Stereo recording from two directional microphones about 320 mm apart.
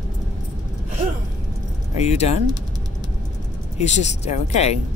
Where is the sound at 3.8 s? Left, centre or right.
Left.